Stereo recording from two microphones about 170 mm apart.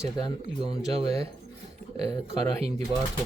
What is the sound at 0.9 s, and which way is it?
Speech, 35° right (ahead or behind).